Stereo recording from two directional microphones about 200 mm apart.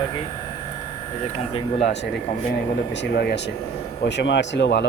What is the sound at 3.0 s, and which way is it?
Speech, 55° left (ahead or behind).